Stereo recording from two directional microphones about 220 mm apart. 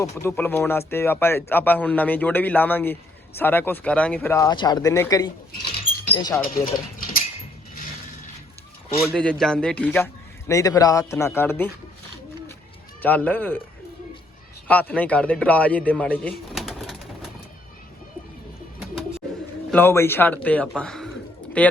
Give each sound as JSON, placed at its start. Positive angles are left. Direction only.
{"t": 0.0, "sound": "speech", "side_deg": 10}
{"t": 7.0, "sound": "a sound", "side_deg": 40}
{"t": 9.0, "sound": "a man's voice", "side_deg": 0}
{"t": 13.0, "sound": "speech", "side_deg": 5}
{"t": 14.7, "sound": "a man's voice", "side_deg": 5}
{"t": 19.7, "sound": "a man's voice", "side_deg": 10}